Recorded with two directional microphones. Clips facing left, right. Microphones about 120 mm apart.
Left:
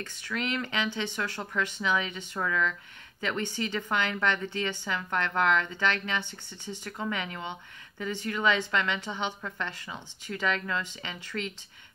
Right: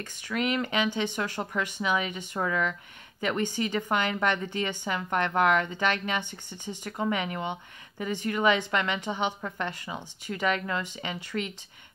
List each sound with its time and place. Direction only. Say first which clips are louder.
0.0 s a woman's voice: right 4 dB; 15° right (ahead or behind)